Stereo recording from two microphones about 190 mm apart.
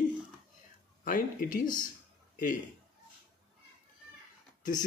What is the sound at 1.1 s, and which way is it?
Speech, 45° left (ahead or behind).